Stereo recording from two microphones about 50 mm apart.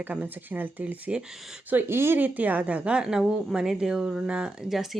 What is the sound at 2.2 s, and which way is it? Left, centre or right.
Speech, right.